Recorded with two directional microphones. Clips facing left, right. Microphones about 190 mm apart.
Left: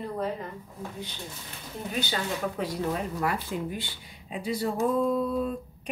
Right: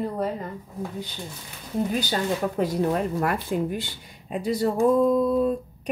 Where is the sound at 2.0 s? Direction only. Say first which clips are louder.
Right 5 dB; 45° right (ahead or behind).